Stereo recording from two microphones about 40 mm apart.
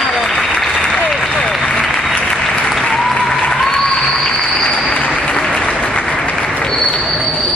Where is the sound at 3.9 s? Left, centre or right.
Left.